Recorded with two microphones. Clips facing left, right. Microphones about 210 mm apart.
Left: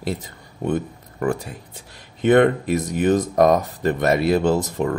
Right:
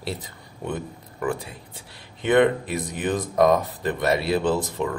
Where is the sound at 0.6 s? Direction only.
50° left (ahead or behind).